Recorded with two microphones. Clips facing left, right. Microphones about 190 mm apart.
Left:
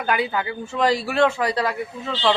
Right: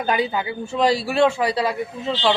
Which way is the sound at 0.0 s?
20° right (ahead or behind).